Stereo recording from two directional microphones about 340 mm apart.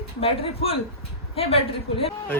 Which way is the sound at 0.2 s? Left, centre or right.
Centre.